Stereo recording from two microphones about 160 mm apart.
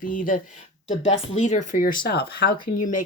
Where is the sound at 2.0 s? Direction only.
80° left; by 3.0 s 60° left (ahead or behind).